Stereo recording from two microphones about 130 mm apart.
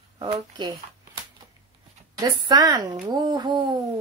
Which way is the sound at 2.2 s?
30° right (ahead or behind).